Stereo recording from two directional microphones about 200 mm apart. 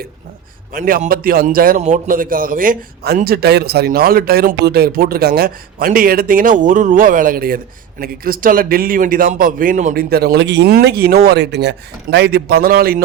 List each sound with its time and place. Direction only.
0.7 s speech: 45° right (ahead or behind)